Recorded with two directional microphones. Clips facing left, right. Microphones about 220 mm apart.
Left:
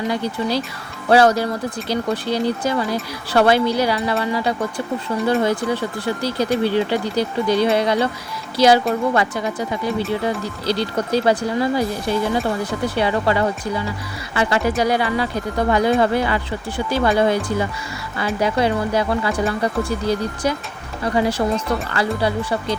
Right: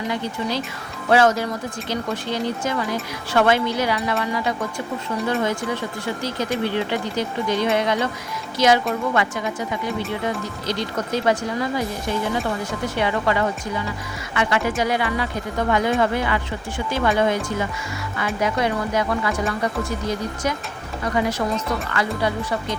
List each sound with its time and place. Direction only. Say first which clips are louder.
0.1 s speech: left 4 dB; 35° left (ahead or behind)